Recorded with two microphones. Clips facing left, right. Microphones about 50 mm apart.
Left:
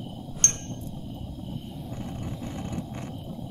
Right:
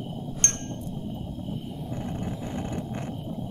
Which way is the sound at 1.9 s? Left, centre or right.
Right.